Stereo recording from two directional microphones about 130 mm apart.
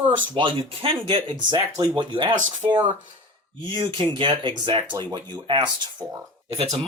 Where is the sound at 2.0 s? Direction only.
35° right (ahead or behind).